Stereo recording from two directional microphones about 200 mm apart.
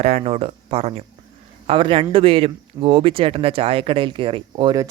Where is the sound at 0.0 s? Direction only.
30° right (ahead or behind).